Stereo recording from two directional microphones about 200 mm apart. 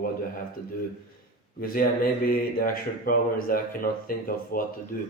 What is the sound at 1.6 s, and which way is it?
Speech, 45° left (ahead or behind).